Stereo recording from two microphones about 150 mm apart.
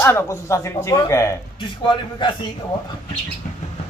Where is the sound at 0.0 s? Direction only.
20° left (ahead or behind).